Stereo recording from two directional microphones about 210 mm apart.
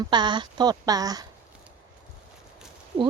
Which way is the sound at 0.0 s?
20° right (ahead or behind).